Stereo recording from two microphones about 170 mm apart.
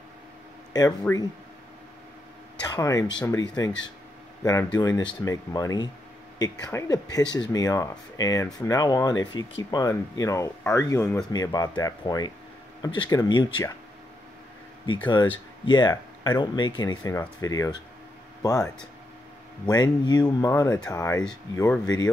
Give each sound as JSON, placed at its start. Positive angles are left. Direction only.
{"t": 1.1, "sound": "speech", "side_deg": 10}
{"t": 2.6, "sound": "speech", "side_deg": 20}
{"t": 15.6, "sound": "speech", "side_deg": 25}
{"t": 19.7, "sound": "speech", "side_deg": 25}